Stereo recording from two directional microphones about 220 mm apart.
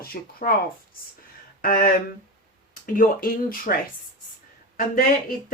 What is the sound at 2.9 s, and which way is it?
Speech, 40° left (ahead or behind).